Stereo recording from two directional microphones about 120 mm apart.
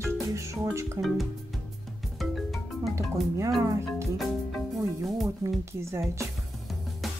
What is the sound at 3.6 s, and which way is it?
Speech, 25° right (ahead or behind).